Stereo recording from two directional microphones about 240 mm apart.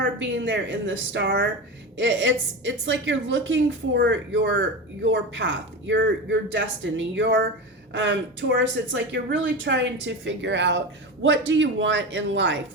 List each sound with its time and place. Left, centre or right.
0.0 s speech: right